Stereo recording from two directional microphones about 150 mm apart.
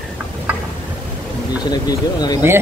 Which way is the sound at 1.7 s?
25° left (ahead or behind).